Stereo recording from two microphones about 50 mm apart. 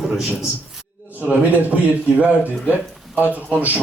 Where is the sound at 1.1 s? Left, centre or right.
Right.